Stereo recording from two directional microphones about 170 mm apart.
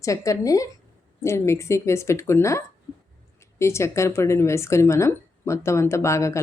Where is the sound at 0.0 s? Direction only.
20° left (ahead or behind).